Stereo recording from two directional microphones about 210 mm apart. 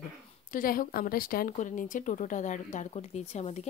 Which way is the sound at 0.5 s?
40° left (ahead or behind).